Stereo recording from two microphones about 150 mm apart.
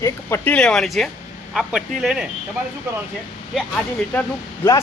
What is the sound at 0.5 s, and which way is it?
Speech, 5° left (ahead or behind).